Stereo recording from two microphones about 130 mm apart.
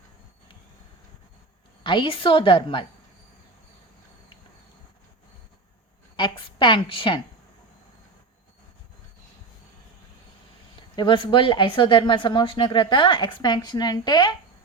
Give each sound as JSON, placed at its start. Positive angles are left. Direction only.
{"t": 1.8, "sound": "speech", "side_deg": 35}
{"t": 6.1, "sound": "speech", "side_deg": 35}
{"t": 10.8, "sound": "speech", "side_deg": 35}